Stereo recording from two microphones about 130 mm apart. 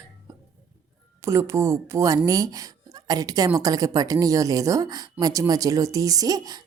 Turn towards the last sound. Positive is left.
turn(degrees=-30)  # may be behind; listen again after turning